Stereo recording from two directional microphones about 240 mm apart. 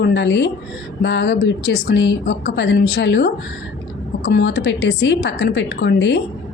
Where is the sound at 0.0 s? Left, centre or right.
Left.